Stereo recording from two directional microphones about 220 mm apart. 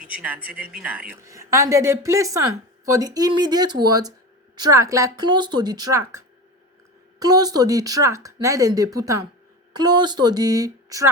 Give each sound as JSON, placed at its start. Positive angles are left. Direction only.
{"t": 0.0, "sound": "speech", "side_deg": -5}